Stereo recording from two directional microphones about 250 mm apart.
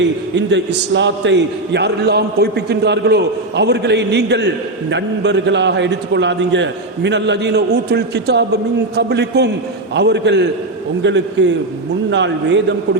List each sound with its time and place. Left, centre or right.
0.0 s a man's voice: right